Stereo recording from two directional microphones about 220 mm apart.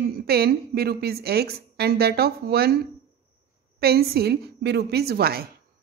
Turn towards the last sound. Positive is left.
turn(degrees=-45)  # may be behind; listen again after turning